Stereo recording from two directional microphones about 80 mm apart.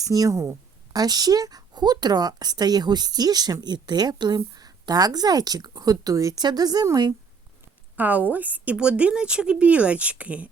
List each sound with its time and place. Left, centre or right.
0.0 s a woman's voice: right
6.4 s a woman's voice: right
7.9 s speech: right